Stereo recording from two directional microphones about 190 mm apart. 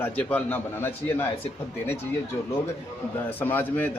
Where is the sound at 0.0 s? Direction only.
10° left (ahead or behind).